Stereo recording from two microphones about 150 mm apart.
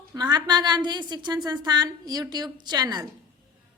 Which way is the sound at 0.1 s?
25° right (ahead or behind).